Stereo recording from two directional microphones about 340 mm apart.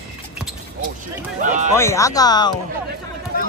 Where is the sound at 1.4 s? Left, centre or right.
Right.